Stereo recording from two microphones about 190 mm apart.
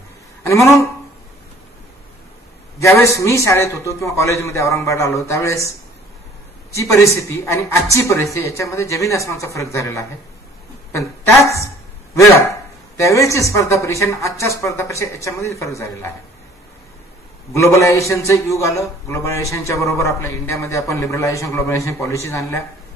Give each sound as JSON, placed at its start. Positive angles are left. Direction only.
{"t": 0.4, "sound": "speech", "side_deg": 15}
{"t": 2.8, "sound": "a man's voice", "side_deg": 15}
{"t": 6.7, "sound": "a man's voice", "side_deg": 15}
{"t": 17.6, "sound": "a man's voice", "side_deg": 15}